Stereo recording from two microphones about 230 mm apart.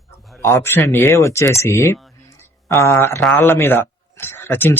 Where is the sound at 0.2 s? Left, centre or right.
Centre.